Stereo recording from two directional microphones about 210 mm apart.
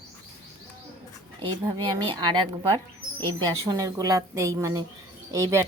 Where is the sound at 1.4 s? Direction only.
20° right (ahead or behind).